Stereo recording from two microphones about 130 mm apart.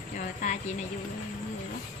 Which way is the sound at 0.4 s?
65° left (ahead or behind).